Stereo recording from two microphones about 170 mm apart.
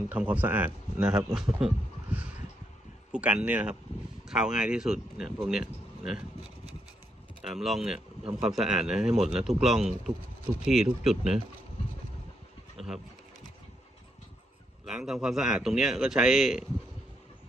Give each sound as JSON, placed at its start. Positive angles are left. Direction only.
{"t": 0.1, "sound": "a man's voice", "side_deg": -10}
{"t": 7.4, "sound": "a man's voice", "side_deg": 0}
{"t": 14.8, "sound": "a man's voice", "side_deg": -5}